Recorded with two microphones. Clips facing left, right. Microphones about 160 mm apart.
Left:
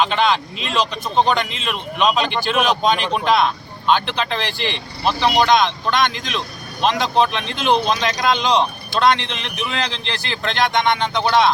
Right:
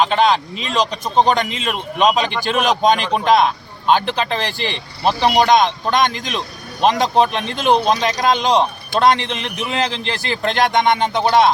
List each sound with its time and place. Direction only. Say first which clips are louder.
0.0 s a man's voice: right 3 dB; 40° right (ahead or behind)